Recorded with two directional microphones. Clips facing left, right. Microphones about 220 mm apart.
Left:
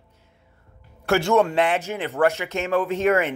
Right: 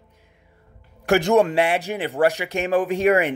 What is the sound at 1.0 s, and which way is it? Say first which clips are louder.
Speech: right 2 dB; 15° right (ahead or behind).